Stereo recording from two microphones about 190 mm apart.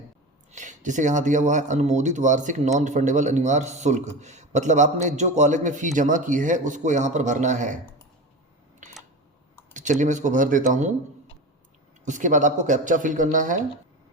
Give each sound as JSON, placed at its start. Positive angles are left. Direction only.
{"t": 0.5, "sound": "speech", "side_deg": -40}
{"t": 9.7, "sound": "speech", "side_deg": -40}
{"t": 12.0, "sound": "speech", "side_deg": -40}